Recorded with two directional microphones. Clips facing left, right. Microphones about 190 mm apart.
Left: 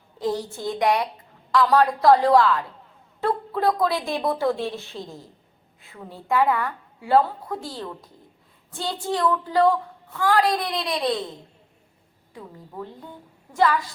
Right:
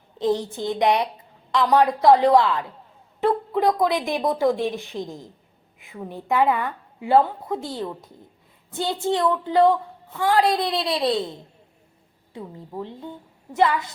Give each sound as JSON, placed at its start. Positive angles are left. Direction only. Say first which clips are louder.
{"t": 0.2, "sound": "a woman's voice", "louder": "right 3 dB", "side_deg": -20}
{"t": 12.3, "sound": "a woman's voice", "louder": "right 5 dB", "side_deg": -25}